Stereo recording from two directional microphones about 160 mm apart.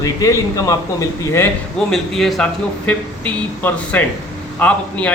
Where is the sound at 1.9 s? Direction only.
Centre (ahead or behind).